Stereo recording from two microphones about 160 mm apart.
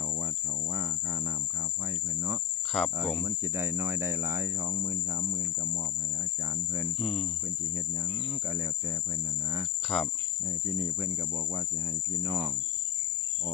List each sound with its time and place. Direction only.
2.7 s cricket: centre (ahead or behind)
3.2 s cricket: 15° right (ahead or behind)
7.0 s cricket: centre (ahead or behind)
9.9 s cricket: centre (ahead or behind)
12.2 s cricket: 15° right (ahead or behind)